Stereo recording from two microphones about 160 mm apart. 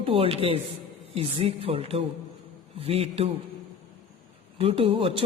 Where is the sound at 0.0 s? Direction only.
35° right (ahead or behind).